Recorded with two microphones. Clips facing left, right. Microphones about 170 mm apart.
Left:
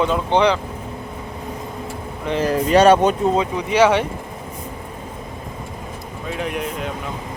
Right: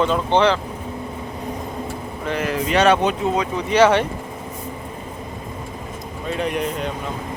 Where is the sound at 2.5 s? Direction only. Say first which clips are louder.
Left 4 dB; 40° left (ahead or behind).